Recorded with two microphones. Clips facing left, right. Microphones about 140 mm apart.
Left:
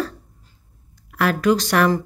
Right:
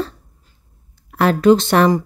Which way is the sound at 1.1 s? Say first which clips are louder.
Right 6 dB; 30° right (ahead or behind).